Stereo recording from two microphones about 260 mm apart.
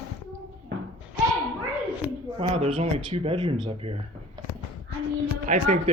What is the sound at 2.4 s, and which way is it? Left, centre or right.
Speech, right.